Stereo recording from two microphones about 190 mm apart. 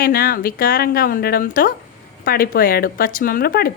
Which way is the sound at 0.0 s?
50° left (ahead or behind).